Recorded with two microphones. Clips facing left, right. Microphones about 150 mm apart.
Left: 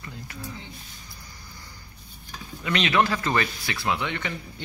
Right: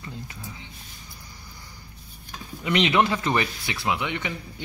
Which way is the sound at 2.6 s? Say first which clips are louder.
Right 2 dB; 20° right (ahead or behind).